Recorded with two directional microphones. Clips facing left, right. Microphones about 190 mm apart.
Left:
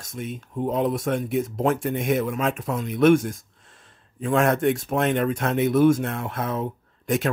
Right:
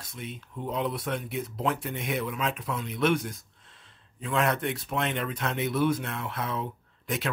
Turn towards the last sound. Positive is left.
turn(degrees=45)  # may be behind; listen again after turning